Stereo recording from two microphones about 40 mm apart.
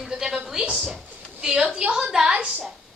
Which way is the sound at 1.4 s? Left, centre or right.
Centre.